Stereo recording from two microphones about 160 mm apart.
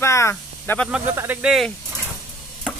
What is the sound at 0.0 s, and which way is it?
Snake, 15° left (ahead or behind).